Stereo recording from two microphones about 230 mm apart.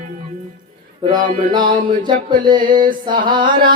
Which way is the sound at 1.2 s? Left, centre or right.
Right.